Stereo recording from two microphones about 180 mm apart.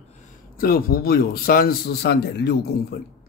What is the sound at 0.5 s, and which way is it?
Speech, 55° left (ahead or behind).